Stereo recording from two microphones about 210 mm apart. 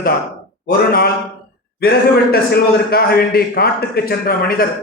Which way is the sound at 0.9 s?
45° left (ahead or behind).